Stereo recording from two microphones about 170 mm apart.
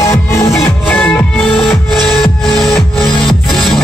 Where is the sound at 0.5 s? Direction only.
5° left (ahead or behind).